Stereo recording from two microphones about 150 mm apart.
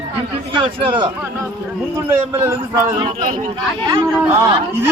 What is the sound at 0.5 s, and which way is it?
Speech, 35° right (ahead or behind).